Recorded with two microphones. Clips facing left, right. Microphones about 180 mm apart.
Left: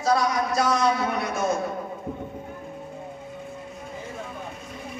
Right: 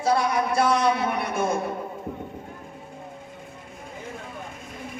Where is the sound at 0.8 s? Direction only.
60° right (ahead or behind).